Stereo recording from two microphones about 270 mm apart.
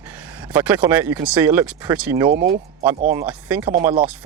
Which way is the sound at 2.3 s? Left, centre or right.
Right.